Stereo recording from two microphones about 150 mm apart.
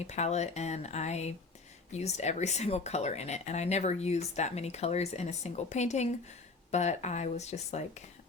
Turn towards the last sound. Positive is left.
turn(degrees=45)  # may be behind; listen again after turning